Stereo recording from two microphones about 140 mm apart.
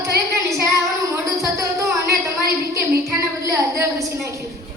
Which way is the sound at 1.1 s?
20° right (ahead or behind).